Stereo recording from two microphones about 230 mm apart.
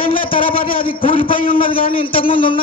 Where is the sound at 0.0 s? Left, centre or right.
Left.